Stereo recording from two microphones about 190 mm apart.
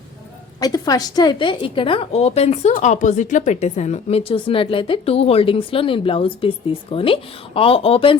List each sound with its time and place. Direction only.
0.6 s a woman's voice: 20° left (ahead or behind)